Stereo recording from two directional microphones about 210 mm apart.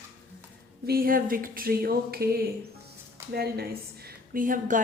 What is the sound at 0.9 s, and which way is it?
A woman's voice, 45° right (ahead or behind).